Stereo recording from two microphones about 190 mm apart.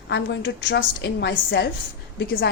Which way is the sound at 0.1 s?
70° left (ahead or behind).